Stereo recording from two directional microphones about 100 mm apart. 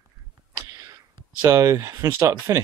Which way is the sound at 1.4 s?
30° right (ahead or behind).